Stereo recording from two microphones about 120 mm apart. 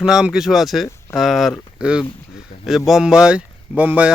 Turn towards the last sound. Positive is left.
turn(degrees=-15)  # may be behind; listen again after turning